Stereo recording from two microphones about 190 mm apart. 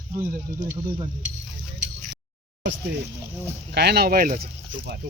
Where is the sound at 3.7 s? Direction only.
60° right (ahead or behind).